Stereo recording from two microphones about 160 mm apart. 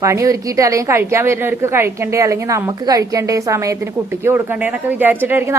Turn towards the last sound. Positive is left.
turn(degrees=-15)  # may be behind; listen again after turning